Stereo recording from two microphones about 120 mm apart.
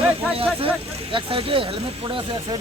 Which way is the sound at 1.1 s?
50° right (ahead or behind).